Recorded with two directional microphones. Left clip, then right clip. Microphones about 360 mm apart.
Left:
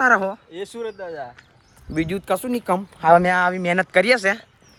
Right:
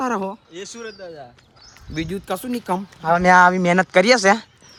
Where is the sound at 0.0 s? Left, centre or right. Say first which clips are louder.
Left 7 dB; centre.